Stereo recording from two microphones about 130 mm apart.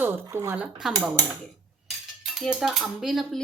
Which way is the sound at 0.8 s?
5° right (ahead or behind).